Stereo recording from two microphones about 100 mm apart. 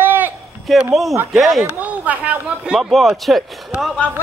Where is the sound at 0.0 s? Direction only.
20° right (ahead or behind).